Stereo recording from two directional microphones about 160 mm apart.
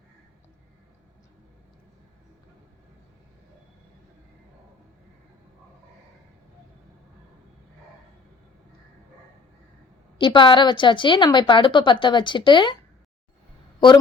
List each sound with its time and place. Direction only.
10.2 s a woman's voice: 30° left (ahead or behind)